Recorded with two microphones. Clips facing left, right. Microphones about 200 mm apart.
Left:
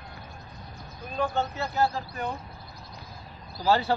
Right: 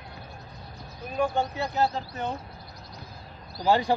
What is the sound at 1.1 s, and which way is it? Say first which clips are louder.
Speech: right 2 dB; 10° right (ahead or behind).